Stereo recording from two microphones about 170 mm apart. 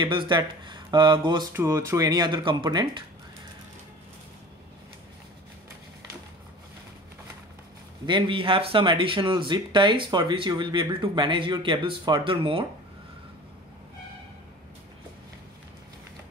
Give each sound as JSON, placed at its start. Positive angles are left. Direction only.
{"t": 0.0, "sound": "speech", "side_deg": -30}
{"t": 1.5, "sound": "speech", "side_deg": -15}
{"t": 8.1, "sound": "speech", "side_deg": -30}